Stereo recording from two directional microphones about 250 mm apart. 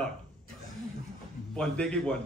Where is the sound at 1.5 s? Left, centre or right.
Centre.